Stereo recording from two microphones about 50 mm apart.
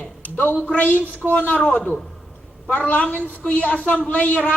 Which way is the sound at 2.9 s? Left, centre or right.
Left.